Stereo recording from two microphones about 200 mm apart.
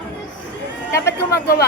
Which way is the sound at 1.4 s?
50° left (ahead or behind).